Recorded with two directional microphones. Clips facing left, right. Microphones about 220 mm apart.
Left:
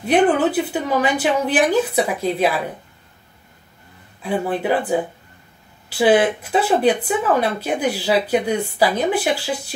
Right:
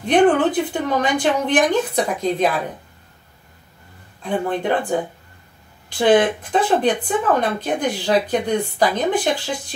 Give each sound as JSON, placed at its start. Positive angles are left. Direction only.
{"t": 0.0, "sound": "speech", "side_deg": 5}
{"t": 4.2, "sound": "speech", "side_deg": 5}